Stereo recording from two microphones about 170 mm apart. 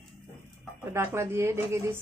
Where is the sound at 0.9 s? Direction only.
15° right (ahead or behind).